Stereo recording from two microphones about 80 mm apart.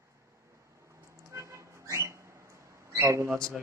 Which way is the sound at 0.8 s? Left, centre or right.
Right.